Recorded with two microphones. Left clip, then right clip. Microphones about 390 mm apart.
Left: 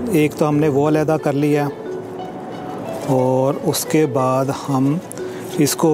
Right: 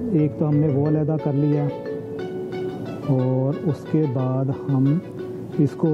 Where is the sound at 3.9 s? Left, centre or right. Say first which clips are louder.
Left 8 dB; centre.